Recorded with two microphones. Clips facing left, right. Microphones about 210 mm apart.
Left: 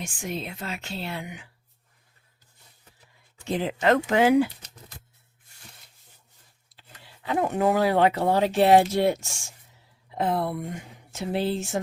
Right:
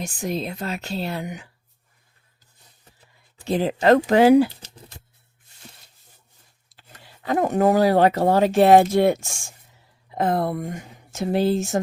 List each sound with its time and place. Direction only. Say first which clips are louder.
0.0 s speech: right 6 dB; 40° right (ahead or behind)
3.4 s speech: right 5 dB; 35° right (ahead or behind)
6.7 s speech: right 2 dB; 45° right (ahead or behind)